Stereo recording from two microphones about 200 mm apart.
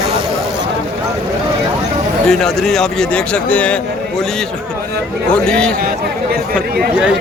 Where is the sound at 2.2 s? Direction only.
Centre (ahead or behind).